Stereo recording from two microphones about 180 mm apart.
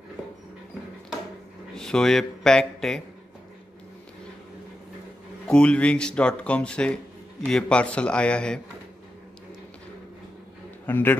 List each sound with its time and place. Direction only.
1.8 s speech: 5° left (ahead or behind)
5.5 s a man's voice: 5° left (ahead or behind)
10.9 s a man's voice: 10° left (ahead or behind)